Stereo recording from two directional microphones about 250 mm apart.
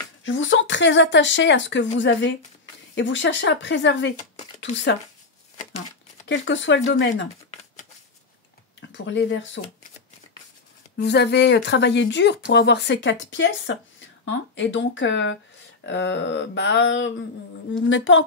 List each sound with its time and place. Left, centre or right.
0.2 s speech: left
6.2 s speech: left
8.9 s speech: left
11.0 s speech: left